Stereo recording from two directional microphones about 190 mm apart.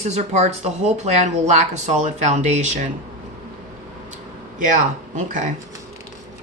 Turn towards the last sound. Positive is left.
turn(degrees=-40)  # may be behind; listen again after turning